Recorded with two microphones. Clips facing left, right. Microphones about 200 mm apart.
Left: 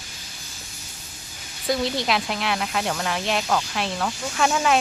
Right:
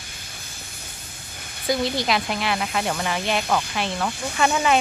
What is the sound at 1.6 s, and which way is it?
Speech, centre (ahead or behind).